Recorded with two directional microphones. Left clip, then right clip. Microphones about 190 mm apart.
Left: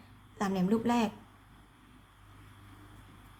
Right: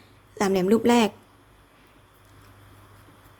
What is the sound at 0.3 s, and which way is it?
Speech, 40° right (ahead or behind).